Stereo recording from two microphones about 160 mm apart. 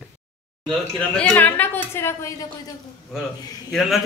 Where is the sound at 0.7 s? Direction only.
5° left (ahead or behind).